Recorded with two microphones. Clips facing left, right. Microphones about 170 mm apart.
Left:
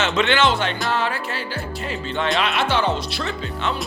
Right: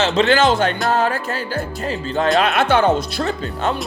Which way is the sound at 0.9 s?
45° right (ahead or behind).